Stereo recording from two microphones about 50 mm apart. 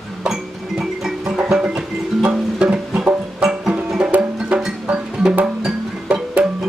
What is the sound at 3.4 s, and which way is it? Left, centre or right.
Music, centre.